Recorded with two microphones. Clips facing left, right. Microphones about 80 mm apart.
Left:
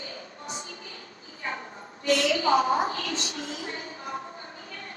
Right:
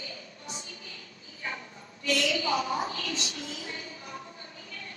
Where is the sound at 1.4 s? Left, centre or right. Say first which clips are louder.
Left 3 dB; left.